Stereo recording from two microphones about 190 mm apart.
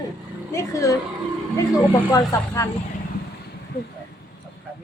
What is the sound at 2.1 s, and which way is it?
Speech, 15° left (ahead or behind).